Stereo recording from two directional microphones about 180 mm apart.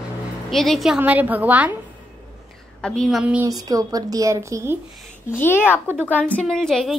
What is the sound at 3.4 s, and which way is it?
Speech, 20° right (ahead or behind).